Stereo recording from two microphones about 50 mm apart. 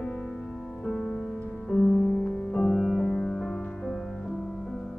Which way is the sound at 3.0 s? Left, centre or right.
Centre.